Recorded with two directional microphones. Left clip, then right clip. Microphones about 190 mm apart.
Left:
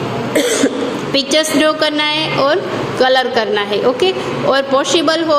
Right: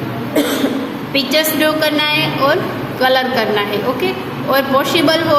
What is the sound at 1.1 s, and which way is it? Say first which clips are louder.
A woman's voice: left 1 dB; 25° left (ahead or behind).